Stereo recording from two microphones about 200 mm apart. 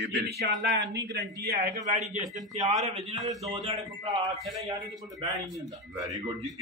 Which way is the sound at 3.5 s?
20° right (ahead or behind).